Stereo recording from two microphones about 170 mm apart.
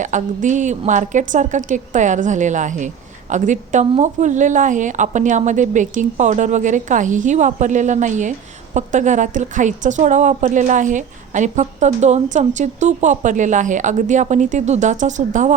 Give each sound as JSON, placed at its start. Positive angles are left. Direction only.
{"t": 0.0, "sound": "a woman's voice", "side_deg": -45}